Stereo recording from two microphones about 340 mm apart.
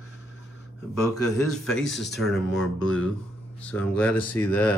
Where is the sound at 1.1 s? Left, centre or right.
Left.